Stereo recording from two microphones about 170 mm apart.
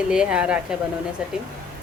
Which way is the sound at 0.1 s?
5° right (ahead or behind).